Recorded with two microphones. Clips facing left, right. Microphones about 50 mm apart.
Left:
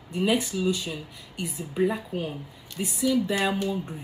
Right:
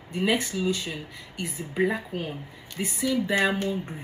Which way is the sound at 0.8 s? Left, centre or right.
Right.